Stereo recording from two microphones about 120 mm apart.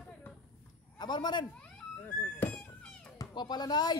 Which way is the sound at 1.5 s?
10° left (ahead or behind).